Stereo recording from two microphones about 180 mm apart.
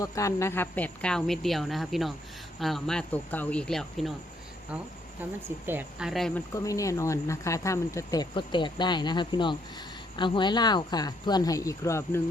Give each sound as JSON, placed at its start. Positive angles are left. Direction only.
{"t": 0.0, "sound": "speech", "side_deg": 15}
{"t": 5.6, "sound": "speech", "side_deg": -5}
{"t": 6.5, "sound": "speech", "side_deg": 20}